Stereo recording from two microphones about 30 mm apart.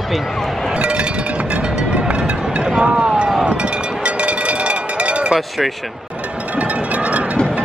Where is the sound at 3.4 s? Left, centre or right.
Right.